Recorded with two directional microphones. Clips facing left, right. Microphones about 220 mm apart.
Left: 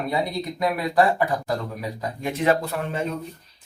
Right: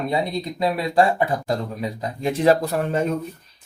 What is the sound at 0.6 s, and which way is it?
Speech, 25° right (ahead or behind).